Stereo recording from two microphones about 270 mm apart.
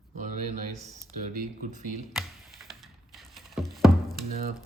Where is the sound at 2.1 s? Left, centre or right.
Centre.